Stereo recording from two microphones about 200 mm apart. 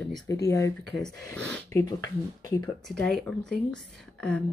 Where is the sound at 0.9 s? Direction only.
5° left (ahead or behind).